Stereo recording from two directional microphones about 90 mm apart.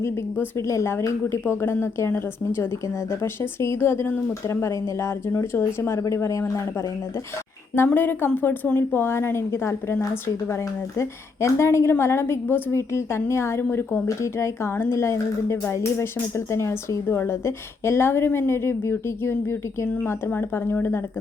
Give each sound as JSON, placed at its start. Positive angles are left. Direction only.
{"t": 0.0, "sound": "a woman's voice", "side_deg": 30}
{"t": 7.9, "sound": "a woman's voice", "side_deg": 20}